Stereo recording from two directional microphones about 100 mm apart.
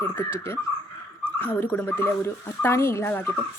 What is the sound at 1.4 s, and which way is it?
A woman's voice, 20° left (ahead or behind).